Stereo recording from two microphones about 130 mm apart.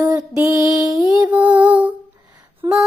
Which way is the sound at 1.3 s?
10° right (ahead or behind).